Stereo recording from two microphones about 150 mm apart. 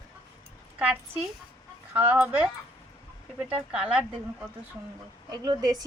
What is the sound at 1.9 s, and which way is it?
Speech, 15° right (ahead or behind).